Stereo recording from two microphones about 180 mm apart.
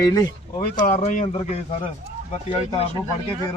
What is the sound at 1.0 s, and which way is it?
Speech, 35° left (ahead or behind).